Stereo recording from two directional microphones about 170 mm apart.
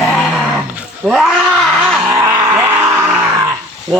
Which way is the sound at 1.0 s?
5° right (ahead or behind).